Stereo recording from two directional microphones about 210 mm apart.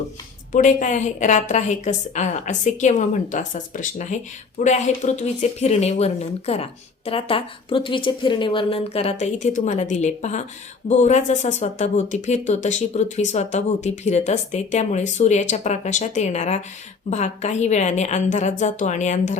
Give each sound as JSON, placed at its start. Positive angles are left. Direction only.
{"t": 0.5, "sound": "speech", "side_deg": 35}